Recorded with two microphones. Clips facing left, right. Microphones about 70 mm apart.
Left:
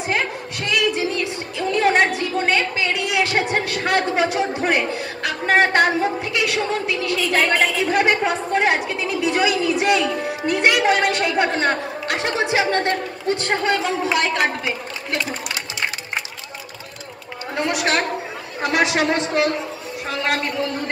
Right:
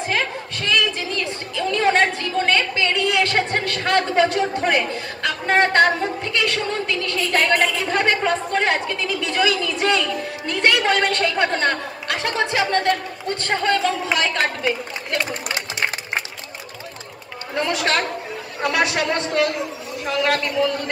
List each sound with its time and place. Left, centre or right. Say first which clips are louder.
0.0 s a woman's voice: left 1 dB; centre
17.6 s a man's voice: even; centre